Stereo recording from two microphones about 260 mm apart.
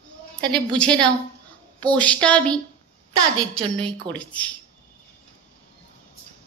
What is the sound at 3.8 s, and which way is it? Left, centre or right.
Speech, centre.